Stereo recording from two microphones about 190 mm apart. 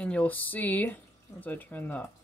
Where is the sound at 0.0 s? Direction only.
5° left (ahead or behind).